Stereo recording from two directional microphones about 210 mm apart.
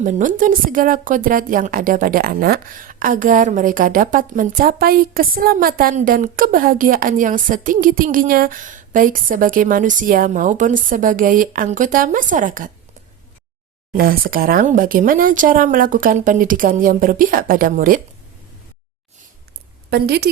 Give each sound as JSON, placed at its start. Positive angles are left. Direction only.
{"t": 0.0, "sound": "a woman's voice", "side_deg": -40}
{"t": 13.9, "sound": "a woman's voice", "side_deg": -45}
{"t": 19.9, "sound": "a woman's voice", "side_deg": -50}